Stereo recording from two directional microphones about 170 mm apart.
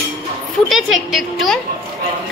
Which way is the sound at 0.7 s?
Centre (ahead or behind).